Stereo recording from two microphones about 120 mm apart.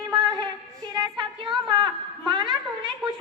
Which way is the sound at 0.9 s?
40° right (ahead or behind).